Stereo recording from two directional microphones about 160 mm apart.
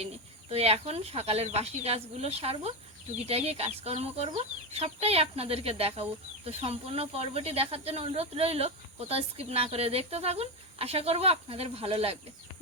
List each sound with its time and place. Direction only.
0.5 s speech: 40° right (ahead or behind)